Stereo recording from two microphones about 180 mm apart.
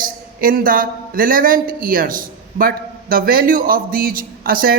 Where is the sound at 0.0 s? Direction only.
50° right (ahead or behind).